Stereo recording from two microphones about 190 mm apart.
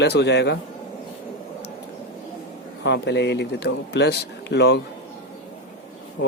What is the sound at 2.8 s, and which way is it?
Speech, 65° left (ahead or behind).